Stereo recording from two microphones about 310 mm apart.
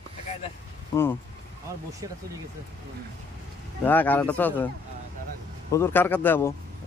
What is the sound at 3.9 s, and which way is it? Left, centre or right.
Speech, centre.